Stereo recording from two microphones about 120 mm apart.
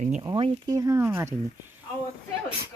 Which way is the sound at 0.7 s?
25° right (ahead or behind).